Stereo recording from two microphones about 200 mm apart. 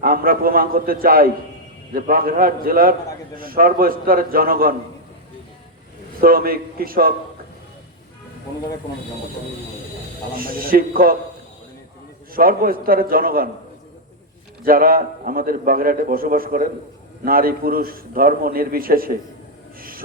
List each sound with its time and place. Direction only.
0.0 s a man's voice: 45° right (ahead or behind)
6.1 s a man's voice: 45° right (ahead or behind)
10.3 s a man's voice: 45° right (ahead or behind)
12.3 s a man's voice: 45° right (ahead or behind)
14.6 s a man's voice: 45° right (ahead or behind)